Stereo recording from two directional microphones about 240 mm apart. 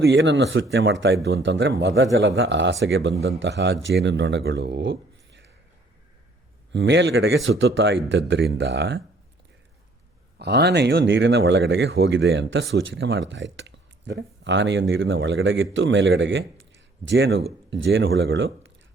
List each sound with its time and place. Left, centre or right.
0.0 s speech: right
6.7 s speech: right
10.3 s speech: right